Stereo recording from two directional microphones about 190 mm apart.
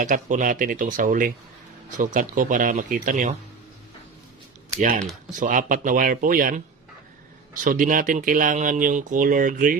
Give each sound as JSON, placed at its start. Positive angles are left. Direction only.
{"t": 0.0, "sound": "speech", "side_deg": -40}
{"t": 4.8, "sound": "speech", "side_deg": -40}